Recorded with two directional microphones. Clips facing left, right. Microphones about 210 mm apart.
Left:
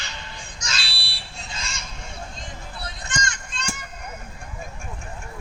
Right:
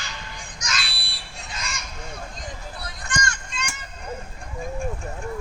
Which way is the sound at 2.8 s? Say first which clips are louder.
Right 1 dB; 20° left (ahead or behind).